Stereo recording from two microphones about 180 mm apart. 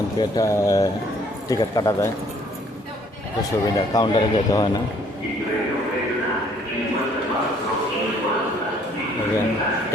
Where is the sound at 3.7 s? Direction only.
20° left (ahead or behind).